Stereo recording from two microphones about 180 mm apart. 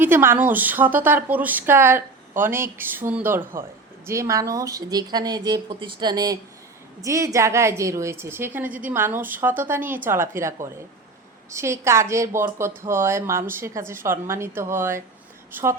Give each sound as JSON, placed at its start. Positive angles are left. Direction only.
{"t": 0.0, "sound": "a woman's voice", "side_deg": -10}